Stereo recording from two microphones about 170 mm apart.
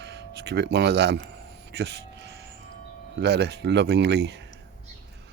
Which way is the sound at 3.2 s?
80° right.